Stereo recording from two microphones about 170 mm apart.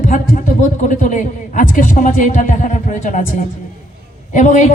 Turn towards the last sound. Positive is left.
turn(degrees=50)  # may be behind; listen again after turning